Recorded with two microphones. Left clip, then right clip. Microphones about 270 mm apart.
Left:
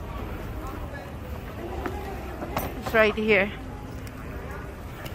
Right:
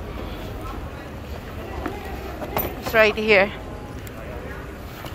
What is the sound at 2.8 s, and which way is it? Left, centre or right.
Speech, centre.